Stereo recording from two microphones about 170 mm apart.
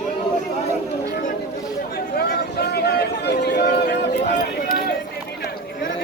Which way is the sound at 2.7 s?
70° left (ahead or behind).